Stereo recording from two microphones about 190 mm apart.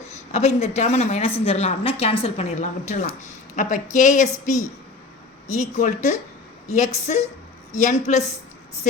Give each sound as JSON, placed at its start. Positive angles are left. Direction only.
{"t": 0.3, "sound": "a woman's voice", "side_deg": 35}
{"t": 5.5, "sound": "a woman's voice", "side_deg": 40}